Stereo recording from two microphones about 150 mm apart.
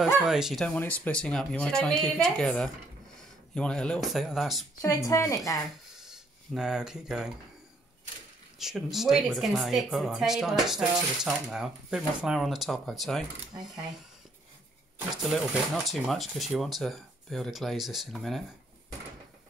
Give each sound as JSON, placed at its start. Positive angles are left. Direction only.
{"t": 0.0, "sound": "speech", "side_deg": -5}
{"t": 0.7, "sound": "speech", "side_deg": 10}
{"t": 4.8, "sound": "speech", "side_deg": 20}
{"t": 5.9, "sound": "a sound", "side_deg": -5}
{"t": 8.5, "sound": "speech", "side_deg": 0}
{"t": 15.2, "sound": "speech", "side_deg": 0}